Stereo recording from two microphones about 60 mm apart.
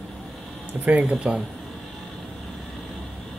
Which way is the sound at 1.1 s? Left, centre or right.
Centre.